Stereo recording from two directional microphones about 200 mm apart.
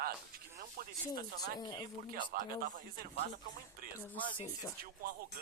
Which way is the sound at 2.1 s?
45° right (ahead or behind).